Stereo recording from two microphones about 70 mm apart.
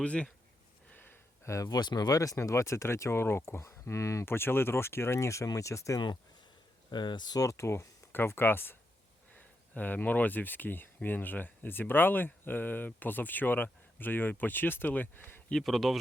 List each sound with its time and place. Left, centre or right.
0.0 s speech: centre
1.5 s speech: left
1.7 s speech: left
6.9 s speech: left
7.4 s speech: left
15.6 s speech: centre